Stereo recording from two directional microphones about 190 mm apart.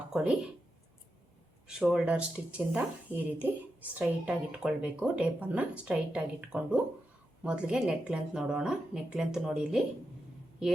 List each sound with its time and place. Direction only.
0.1 s speech: 5° right (ahead or behind)
1.6 s speech: 5° right (ahead or behind)